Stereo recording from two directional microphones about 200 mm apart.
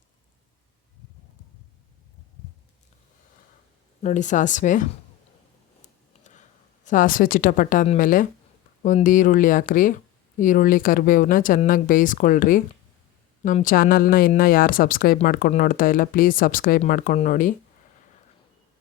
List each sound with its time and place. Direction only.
4.0 s speech: 40° left (ahead or behind)
5.8 s a sound: 35° left (ahead or behind)
8.8 s speech: 40° left (ahead or behind)